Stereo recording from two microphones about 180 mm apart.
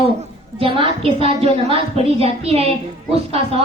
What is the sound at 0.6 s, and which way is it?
A woman's voice, 30° right (ahead or behind).